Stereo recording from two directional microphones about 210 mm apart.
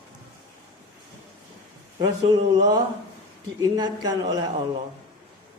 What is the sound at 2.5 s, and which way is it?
A man's voice, 20° right (ahead or behind).